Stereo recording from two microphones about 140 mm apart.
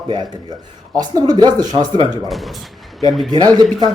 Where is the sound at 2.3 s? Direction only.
Centre (ahead or behind).